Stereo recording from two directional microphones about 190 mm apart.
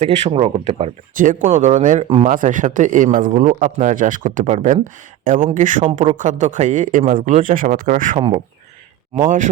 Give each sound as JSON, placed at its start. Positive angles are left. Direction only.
{"t": 0.0, "sound": "speech", "side_deg": -35}
{"t": 1.1, "sound": "speech", "side_deg": -45}